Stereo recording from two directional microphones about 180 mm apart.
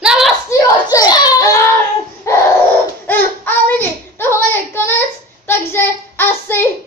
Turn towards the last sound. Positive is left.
turn(degrees=10)  # may be behind; listen again after turning